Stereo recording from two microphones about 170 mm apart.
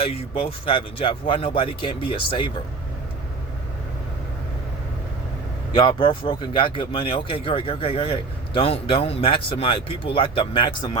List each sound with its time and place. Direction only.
0.0 s speech: 30° left (ahead or behind)
5.7 s speech: 30° left (ahead or behind)